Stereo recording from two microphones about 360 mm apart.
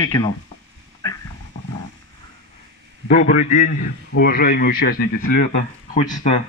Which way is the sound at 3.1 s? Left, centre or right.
Left.